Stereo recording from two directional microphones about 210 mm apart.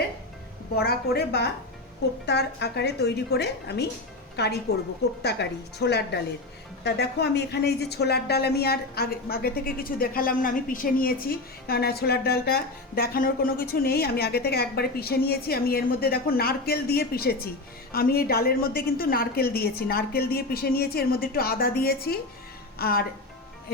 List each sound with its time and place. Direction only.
0.8 s a woman's voice: 50° left (ahead or behind)